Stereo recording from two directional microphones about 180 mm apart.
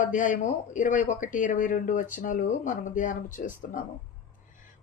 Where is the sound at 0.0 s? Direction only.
45° left (ahead or behind).